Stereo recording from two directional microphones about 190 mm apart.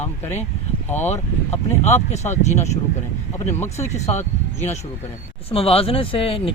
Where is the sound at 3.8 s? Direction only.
35° left (ahead or behind).